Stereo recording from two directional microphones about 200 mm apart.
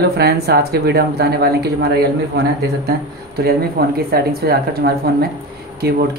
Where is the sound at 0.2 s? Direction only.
50° right (ahead or behind).